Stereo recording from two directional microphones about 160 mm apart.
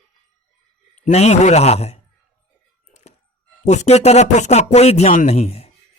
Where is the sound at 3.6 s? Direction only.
45° left (ahead or behind).